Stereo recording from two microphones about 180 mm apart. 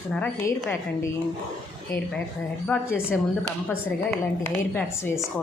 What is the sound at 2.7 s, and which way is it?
A woman's voice, 10° left (ahead or behind).